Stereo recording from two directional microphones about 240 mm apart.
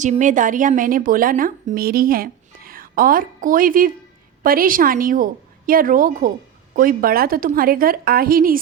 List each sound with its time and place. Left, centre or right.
0.0 s a woman's voice: right